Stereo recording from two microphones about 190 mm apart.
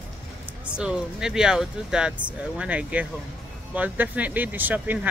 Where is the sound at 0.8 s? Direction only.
5° right (ahead or behind).